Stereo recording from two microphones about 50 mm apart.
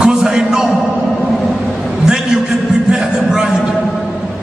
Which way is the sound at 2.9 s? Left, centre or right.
Centre.